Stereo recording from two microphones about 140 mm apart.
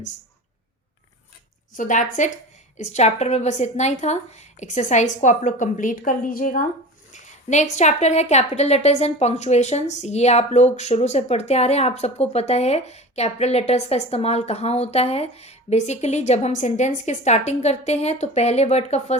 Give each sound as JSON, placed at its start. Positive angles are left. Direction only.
{"t": 1.7, "sound": "a woman's voice", "side_deg": 65}
{"t": 7.1, "sound": "speech", "side_deg": 55}